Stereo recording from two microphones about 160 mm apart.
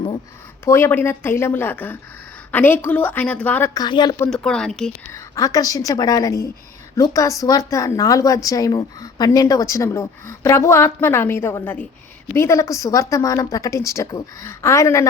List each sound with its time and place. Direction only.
0.6 s a woman's voice: 15° left (ahead or behind)
3.8 s a woman's voice: 25° left (ahead or behind)
4.2 s a woman's voice: 15° left (ahead or behind)
5.1 s a woman's voice: 20° left (ahead or behind)